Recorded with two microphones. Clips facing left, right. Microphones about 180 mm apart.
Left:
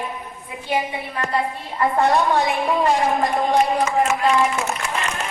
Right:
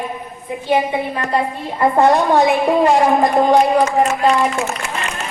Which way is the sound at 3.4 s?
75° right (ahead or behind).